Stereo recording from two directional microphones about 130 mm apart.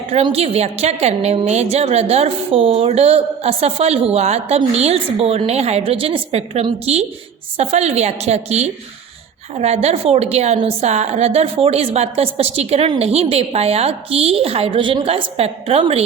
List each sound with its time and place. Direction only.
0.1 s a woman's voice: 50° right (ahead or behind)